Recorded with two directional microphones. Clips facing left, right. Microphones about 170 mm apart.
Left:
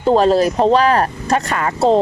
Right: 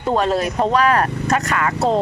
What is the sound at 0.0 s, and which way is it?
Speech, 30° left (ahead or behind).